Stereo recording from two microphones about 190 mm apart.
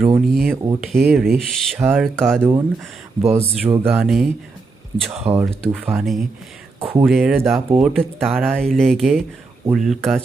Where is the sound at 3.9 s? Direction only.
5° right (ahead or behind).